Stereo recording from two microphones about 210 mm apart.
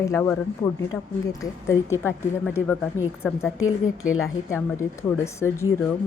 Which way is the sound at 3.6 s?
75° left (ahead or behind).